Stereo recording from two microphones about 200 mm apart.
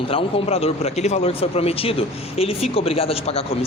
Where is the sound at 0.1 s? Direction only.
30° left (ahead or behind).